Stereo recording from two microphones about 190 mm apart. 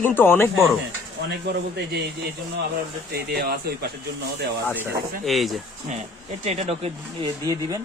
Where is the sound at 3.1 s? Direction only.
55° right (ahead or behind).